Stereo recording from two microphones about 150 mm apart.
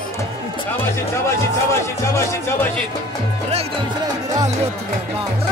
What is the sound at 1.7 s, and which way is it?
Speech, 15° left (ahead or behind).